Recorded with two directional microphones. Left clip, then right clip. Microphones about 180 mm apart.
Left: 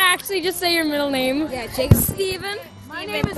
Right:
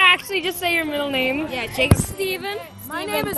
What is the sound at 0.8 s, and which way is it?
Speech, 45° left (ahead or behind).